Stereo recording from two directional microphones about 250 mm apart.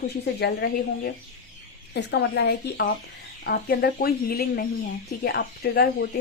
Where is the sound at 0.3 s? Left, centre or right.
Left.